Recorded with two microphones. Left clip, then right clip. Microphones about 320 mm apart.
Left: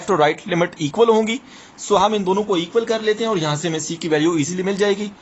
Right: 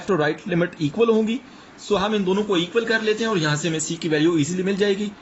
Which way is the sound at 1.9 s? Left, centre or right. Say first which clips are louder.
Left 5 dB; centre.